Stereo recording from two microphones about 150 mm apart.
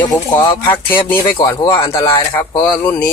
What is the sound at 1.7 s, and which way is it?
Speech, 35° left (ahead or behind).